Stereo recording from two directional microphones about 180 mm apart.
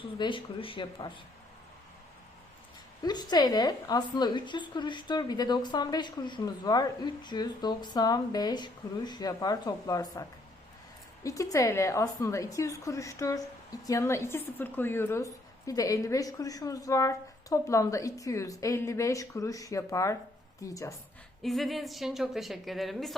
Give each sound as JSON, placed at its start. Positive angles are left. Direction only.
{"t": 0.2, "sound": "a woman's voice", "side_deg": 30}
{"t": 3.0, "sound": "a woman's voice", "side_deg": 25}
{"t": 21.4, "sound": "a woman's voice", "side_deg": 0}